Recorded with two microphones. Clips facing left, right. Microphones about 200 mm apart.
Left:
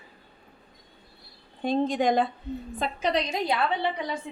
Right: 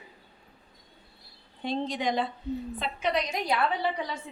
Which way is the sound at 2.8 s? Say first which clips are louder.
Left 4 dB; 35° left (ahead or behind).